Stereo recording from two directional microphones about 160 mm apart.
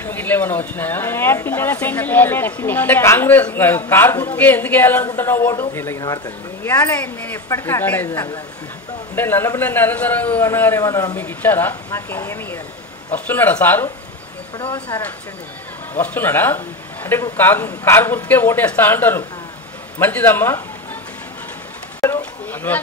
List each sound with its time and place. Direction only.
0.0 s speech: 10° left (ahead or behind)
14.6 s speech: 25° left (ahead or behind)
15.9 s speech: 10° left (ahead or behind)
22.0 s a sound: 15° left (ahead or behind)